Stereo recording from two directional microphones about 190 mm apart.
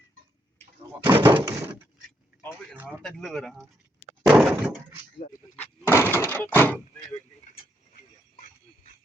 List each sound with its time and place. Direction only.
1.0 s speech: 25° right (ahead or behind)
3.0 s speech: centre (ahead or behind)
4.3 s a sound: 5° right (ahead or behind)
5.2 s speech: 40° left (ahead or behind)
5.9 s speech: 15° left (ahead or behind)